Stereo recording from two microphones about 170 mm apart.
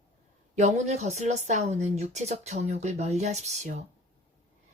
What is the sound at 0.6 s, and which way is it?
A woman's voice, 40° right (ahead or behind).